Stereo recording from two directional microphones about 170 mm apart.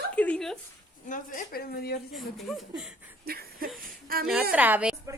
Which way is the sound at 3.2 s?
60° right (ahead or behind).